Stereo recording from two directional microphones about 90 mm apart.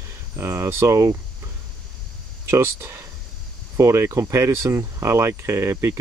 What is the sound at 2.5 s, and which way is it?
Speech, 30° right (ahead or behind).